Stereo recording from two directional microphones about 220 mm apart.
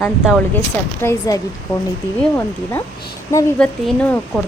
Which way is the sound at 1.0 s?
15° left (ahead or behind).